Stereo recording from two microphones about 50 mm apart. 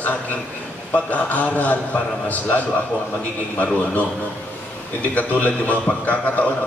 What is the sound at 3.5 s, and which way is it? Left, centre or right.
Speech, left.